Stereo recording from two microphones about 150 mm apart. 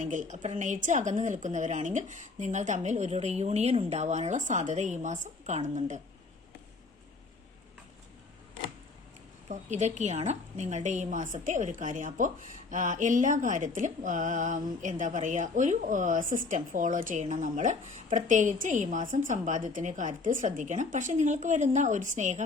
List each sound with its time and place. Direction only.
0.0 s a woman's voice: 55° right (ahead or behind)
9.5 s a woman's voice: 50° right (ahead or behind)